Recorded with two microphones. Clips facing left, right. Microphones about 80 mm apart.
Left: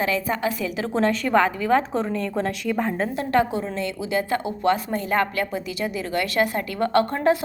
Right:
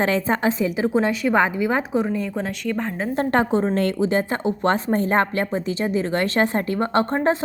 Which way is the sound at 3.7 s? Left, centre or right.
Right.